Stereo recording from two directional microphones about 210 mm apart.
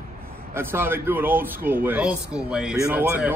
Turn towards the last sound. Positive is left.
turn(degrees=-10)  # may be behind; listen again after turning